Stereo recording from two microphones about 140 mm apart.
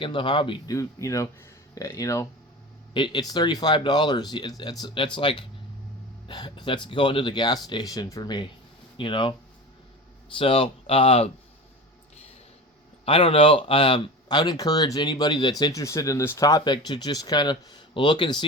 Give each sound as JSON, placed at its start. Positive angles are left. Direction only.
{"t": 0.0, "sound": "speech", "side_deg": 35}
{"t": 0.7, "sound": "speech", "side_deg": 20}
{"t": 2.9, "sound": "speech", "side_deg": 35}
{"t": 10.3, "sound": "speech", "side_deg": 40}
{"t": 13.1, "sound": "speech", "side_deg": 40}